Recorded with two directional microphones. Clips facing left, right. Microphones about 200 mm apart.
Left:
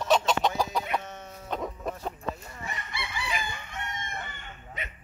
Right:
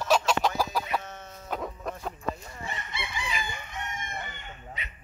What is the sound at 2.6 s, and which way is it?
Chicken, 20° right (ahead or behind).